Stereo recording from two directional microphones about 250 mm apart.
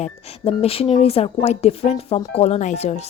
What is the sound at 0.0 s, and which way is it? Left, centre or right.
Speech, left.